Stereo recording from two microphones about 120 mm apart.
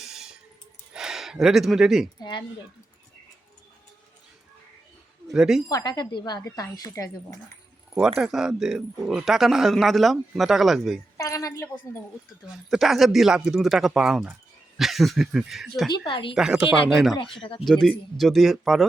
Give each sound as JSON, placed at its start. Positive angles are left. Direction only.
{"t": 0.0, "sound": "a sound", "side_deg": -5}
{"t": 0.9, "sound": "speech", "side_deg": -5}
{"t": 5.3, "sound": "speech", "side_deg": -5}
{"t": 5.6, "sound": "speech", "side_deg": 35}
{"t": 8.2, "sound": "speech", "side_deg": -5}
{"t": 11.2, "sound": "a woman's voice", "side_deg": 30}
{"t": 12.7, "sound": "speech", "side_deg": 0}
{"t": 15.9, "sound": "a woman's voice", "side_deg": 45}
{"t": 16.3, "sound": "speech", "side_deg": -5}